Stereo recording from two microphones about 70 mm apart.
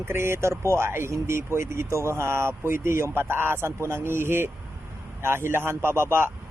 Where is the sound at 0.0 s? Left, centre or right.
Right.